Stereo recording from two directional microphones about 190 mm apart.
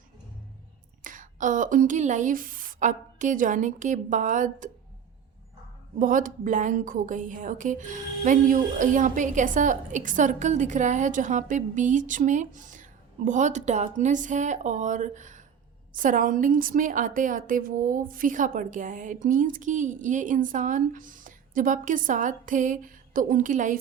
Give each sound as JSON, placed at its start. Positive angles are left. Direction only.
{"t": 1.0, "sound": "speech", "side_deg": -45}
{"t": 6.0, "sound": "a woman's voice", "side_deg": -45}